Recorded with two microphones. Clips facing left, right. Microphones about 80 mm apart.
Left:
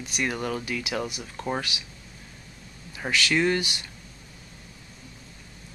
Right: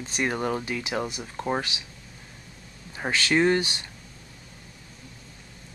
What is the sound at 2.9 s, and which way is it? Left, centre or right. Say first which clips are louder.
Speech: right 1 dB; right.